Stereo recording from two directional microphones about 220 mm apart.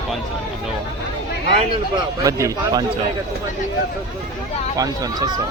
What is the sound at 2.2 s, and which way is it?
Speech, 15° right (ahead or behind).